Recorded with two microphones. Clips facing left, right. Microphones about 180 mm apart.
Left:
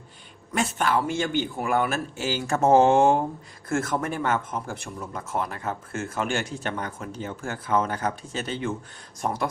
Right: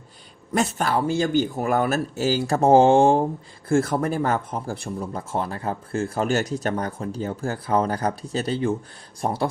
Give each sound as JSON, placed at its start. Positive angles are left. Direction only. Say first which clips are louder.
{"t": 0.5, "sound": "speech", "louder": "right 2 dB", "side_deg": -40}